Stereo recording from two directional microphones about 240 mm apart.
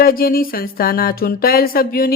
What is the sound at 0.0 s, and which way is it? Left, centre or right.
Speech, left.